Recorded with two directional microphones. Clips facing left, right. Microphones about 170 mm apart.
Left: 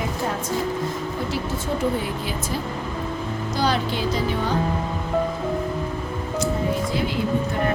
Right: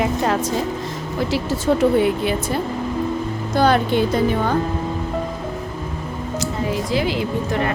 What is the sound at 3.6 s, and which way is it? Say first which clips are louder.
Speech: right 7 dB; 55° right (ahead or behind).